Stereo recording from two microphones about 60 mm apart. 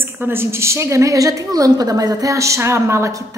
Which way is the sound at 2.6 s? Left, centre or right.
Right.